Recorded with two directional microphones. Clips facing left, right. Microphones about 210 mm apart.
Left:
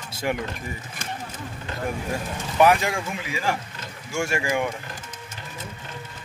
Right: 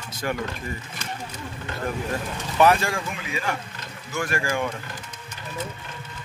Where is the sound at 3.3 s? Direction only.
30° left (ahead or behind).